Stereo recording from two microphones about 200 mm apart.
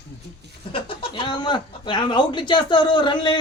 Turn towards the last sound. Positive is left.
turn(degrees=25)  # may be behind; listen again after turning